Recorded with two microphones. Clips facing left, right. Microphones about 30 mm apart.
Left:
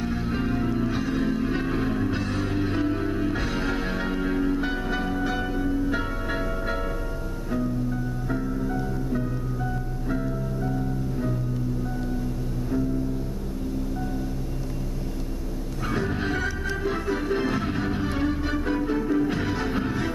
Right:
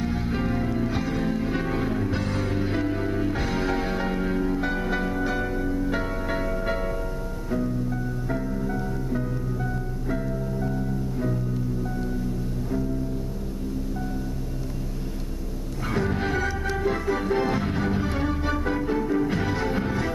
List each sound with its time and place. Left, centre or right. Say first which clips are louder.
0.0 s music: even; centre
8.3 s music: left 1 dB; centre
15.9 s music: right 1 dB; centre
16.8 s organ: right 2 dB; centre